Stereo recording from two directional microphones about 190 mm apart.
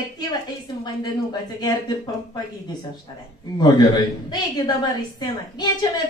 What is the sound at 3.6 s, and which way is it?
A man's voice, 20° left (ahead or behind).